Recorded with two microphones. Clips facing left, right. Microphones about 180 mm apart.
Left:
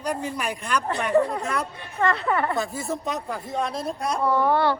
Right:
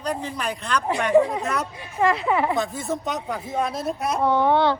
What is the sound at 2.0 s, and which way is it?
Speech, 15° right (ahead or behind).